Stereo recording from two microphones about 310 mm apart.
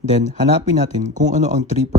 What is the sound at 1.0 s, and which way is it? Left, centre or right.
Speech, right.